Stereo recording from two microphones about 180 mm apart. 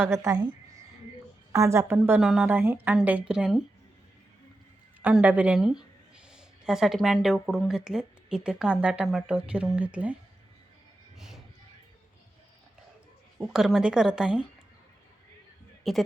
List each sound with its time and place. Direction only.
0.0 s a woman's voice: 15° right (ahead or behind)
1.5 s a woman's voice: 15° right (ahead or behind)
5.0 s a woman's voice: 10° right (ahead or behind)
13.4 s a woman's voice: centre (ahead or behind)
15.8 s speech: centre (ahead or behind)